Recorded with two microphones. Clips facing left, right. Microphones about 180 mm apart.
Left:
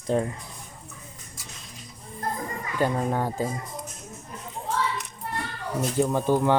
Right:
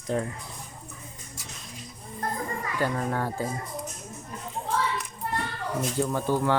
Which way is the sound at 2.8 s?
20° left (ahead or behind).